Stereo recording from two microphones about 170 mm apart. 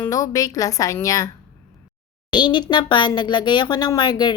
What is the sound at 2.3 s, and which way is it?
Speech, 25° left (ahead or behind).